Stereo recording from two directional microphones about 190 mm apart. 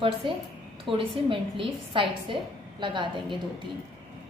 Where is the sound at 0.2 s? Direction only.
25° right (ahead or behind).